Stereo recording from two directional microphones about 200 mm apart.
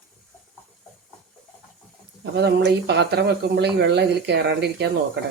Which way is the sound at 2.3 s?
55° right (ahead or behind).